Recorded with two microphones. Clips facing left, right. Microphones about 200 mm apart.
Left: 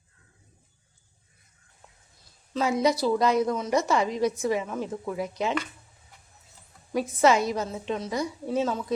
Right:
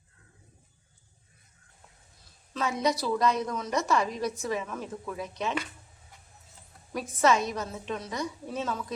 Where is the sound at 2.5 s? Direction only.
30° left (ahead or behind).